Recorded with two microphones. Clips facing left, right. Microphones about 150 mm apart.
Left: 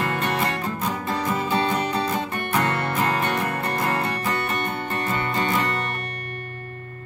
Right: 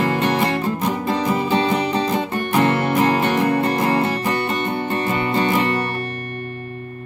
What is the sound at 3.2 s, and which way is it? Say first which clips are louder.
Music: right 7 dB; 30° right (ahead or behind).